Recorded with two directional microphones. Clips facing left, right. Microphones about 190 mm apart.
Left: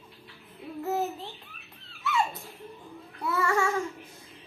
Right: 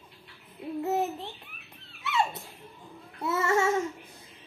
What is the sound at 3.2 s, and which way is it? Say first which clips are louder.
Child singing: right 1 dB; 25° right (ahead or behind).